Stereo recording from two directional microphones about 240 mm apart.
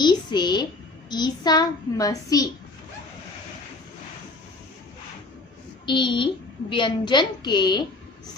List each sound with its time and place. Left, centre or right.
0.0 s a woman's voice: centre
5.8 s a child's voice: centre